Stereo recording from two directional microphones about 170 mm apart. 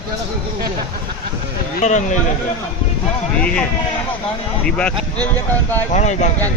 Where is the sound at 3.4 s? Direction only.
5° left (ahead or behind).